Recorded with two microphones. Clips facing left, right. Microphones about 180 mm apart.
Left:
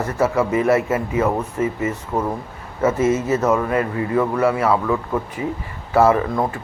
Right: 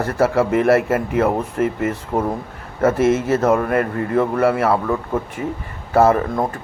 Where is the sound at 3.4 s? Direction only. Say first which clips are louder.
Right 2 dB; 55° right (ahead or behind).